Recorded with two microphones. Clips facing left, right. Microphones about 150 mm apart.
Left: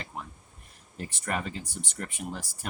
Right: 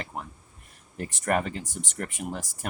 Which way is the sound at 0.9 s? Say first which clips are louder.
Right 6 dB; 55° right (ahead or behind).